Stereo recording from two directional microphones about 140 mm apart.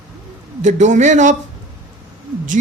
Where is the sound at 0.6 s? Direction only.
60° right (ahead or behind).